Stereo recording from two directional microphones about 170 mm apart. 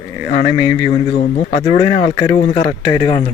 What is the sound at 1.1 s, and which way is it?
Speech, 55° left (ahead or behind).